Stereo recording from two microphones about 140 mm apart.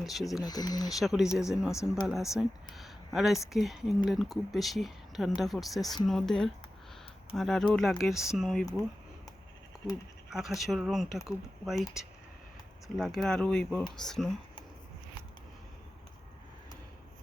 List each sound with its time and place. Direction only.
0.0 s speech: centre (ahead or behind)
0.4 s speech: 30° left (ahead or behind)
0.9 s speech: centre (ahead or behind)
1.7 s speech: 20° left (ahead or behind)
2.0 s speech: 5° right (ahead or behind)
10.3 s speech: centre (ahead or behind)
13.0 s speech: 5° left (ahead or behind)